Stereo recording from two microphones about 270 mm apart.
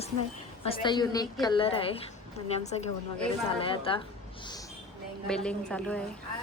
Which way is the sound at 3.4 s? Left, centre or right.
Centre.